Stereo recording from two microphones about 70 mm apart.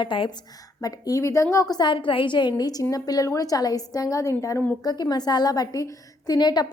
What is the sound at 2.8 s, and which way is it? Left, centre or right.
A woman's voice, left.